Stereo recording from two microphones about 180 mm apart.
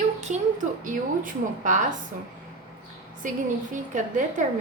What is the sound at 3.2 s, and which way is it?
A woman's voice, 45° right (ahead or behind).